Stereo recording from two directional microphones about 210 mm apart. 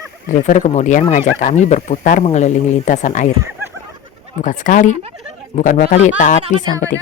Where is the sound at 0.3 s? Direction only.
40° left (ahead or behind).